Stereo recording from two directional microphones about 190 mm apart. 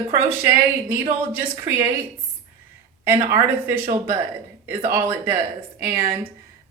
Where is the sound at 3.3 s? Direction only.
10° right (ahead or behind).